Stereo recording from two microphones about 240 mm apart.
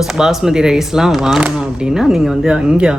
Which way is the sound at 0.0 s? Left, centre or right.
Centre.